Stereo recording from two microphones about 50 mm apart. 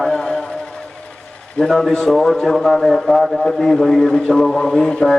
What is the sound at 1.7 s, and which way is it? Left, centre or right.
A man's voice, centre.